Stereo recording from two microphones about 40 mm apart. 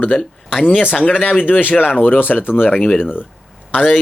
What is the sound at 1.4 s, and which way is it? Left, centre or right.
Speech, left.